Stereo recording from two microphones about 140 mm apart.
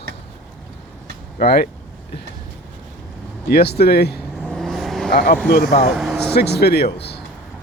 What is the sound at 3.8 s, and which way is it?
Speech, 90° left.